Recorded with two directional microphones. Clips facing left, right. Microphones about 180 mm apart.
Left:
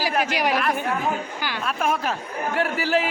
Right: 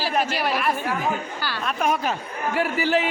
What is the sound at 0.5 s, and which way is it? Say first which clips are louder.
A man's voice: left 1 dB; 5° right (ahead or behind).